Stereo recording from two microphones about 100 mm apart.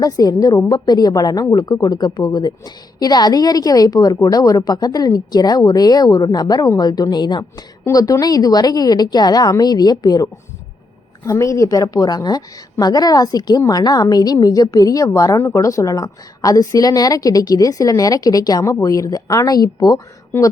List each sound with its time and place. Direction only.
0.0 s a woman's voice: 40° left (ahead or behind)
7.9 s a woman's voice: 30° left (ahead or behind)
11.3 s a woman's voice: 30° left (ahead or behind)
20.3 s speech: 20° left (ahead or behind)